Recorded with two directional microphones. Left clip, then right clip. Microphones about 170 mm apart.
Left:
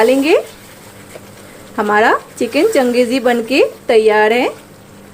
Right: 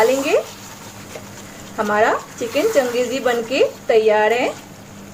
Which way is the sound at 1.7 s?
55° left (ahead or behind).